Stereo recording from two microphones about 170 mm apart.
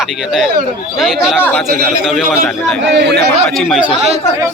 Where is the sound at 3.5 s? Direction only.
Centre (ahead or behind).